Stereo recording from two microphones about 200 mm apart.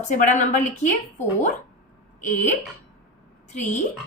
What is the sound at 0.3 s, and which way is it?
Speech, 40° left (ahead or behind).